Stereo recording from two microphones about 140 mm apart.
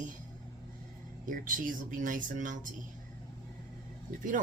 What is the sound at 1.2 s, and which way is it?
Speech, 70° right (ahead or behind).